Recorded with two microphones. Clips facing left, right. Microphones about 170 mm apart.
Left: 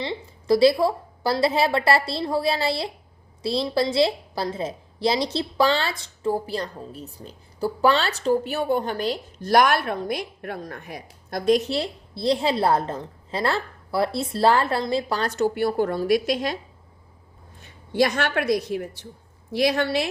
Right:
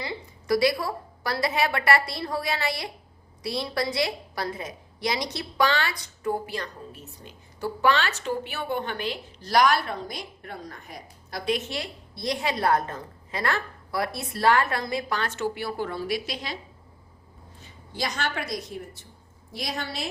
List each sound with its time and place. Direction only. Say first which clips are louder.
0.0 s a woman's voice: left 5 dB; 25° left (ahead or behind); by 16.6 s 50° left (ahead or behind)
17.6 s a woman's voice: left 11 dB; 60° left (ahead or behind)